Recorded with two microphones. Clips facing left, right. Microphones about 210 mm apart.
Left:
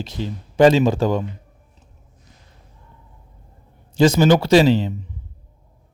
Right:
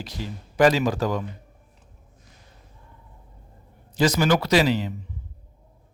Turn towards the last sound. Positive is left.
turn(degrees=25)  # may be behind; listen again after turning